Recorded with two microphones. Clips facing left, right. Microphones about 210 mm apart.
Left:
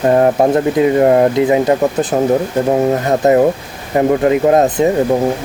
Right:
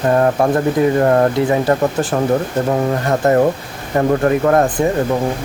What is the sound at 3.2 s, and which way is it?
Speech, 20° left (ahead or behind).